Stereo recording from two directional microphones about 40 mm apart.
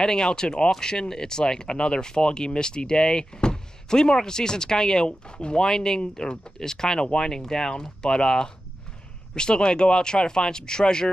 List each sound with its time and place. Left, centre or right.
0.0 s speech: centre